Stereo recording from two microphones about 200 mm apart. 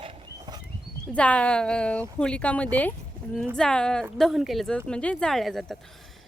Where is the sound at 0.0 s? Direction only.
25° right (ahead or behind).